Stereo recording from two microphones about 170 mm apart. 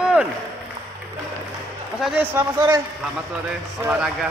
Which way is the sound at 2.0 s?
10° right (ahead or behind).